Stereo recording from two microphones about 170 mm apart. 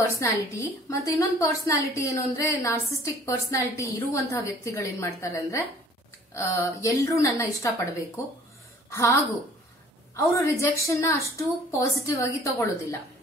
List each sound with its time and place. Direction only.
0.2 s a woman's voice: 15° left (ahead or behind)
8.9 s a woman's voice: 15° left (ahead or behind)